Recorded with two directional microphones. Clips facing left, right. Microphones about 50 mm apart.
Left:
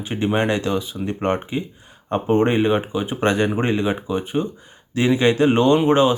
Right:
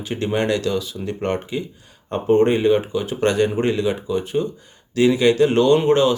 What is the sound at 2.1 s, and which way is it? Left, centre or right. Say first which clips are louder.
Speech: right 1 dB; left.